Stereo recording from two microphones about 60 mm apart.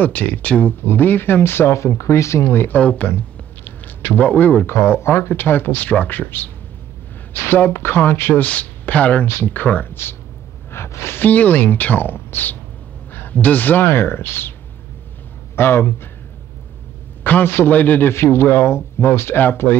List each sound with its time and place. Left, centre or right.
0.0 s speech: left
2.8 s speech: centre
3.1 s a sound: left
4.6 s speech: left
8.5 s speech: left
9.2 s speech: left
10.7 s speech: left
11.1 s speech: left
15.5 s speech: left
17.2 s a man's voice: left
18.1 s speech: left